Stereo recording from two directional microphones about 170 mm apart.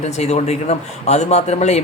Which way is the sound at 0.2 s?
40° left (ahead or behind).